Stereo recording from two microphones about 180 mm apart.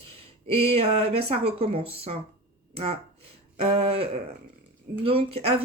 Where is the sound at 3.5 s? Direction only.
35° right (ahead or behind).